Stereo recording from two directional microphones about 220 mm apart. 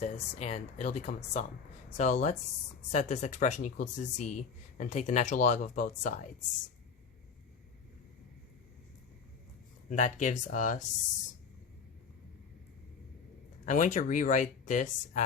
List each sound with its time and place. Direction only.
0.0 s speech: 30° left (ahead or behind)
9.9 s speech: 35° left (ahead or behind)
13.7 s speech: 35° left (ahead or behind)